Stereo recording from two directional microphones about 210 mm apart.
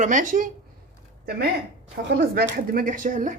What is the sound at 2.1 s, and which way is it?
Speech, 50° right (ahead or behind).